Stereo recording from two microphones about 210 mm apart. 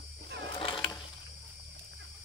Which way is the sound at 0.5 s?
25° left (ahead or behind).